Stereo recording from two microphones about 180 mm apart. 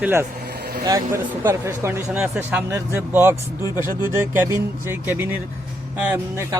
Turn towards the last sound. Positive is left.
turn(degrees=-10)  # may be behind; listen again after turning